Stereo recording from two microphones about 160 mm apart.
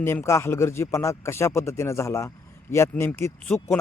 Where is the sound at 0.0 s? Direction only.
15° left (ahead or behind).